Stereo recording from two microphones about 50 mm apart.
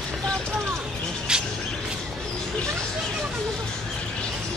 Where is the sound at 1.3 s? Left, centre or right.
Centre.